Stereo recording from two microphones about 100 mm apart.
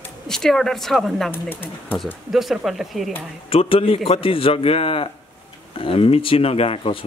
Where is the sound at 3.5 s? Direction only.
70° left (ahead or behind).